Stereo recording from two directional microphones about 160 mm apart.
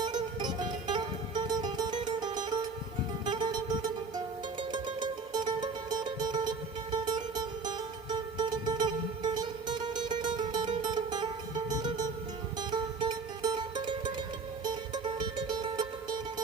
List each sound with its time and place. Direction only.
0.0 s music: 25° right (ahead or behind)